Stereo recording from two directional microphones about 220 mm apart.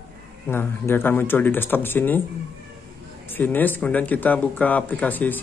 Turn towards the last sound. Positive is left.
turn(degrees=10)  # may be behind; listen again after turning